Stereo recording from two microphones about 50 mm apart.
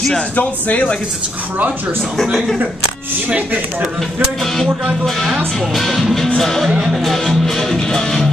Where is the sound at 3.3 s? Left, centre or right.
Right.